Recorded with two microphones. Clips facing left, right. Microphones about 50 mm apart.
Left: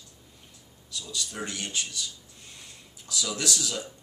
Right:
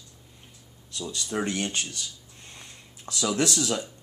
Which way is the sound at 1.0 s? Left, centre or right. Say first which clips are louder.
Right 7 dB; right.